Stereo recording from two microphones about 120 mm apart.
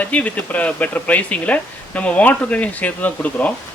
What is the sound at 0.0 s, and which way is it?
Speech, 10° left (ahead or behind).